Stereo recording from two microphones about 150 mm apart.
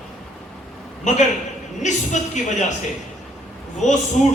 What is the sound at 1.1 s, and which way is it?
A man's voice, 55° left (ahead or behind).